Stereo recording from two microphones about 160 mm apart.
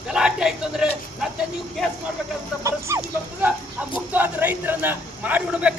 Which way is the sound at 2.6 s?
20° right (ahead or behind).